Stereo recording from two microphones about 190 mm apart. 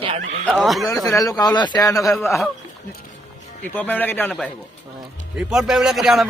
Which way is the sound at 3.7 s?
10° left (ahead or behind).